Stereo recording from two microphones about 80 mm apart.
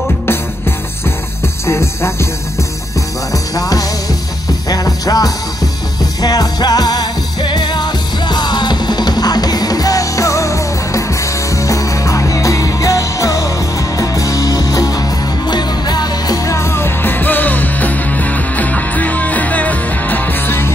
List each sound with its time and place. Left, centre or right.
1.7 s music: left
3.5 s music: left
16.4 s music: left